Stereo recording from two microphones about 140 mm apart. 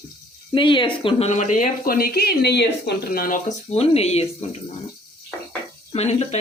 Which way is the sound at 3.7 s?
50° left (ahead or behind).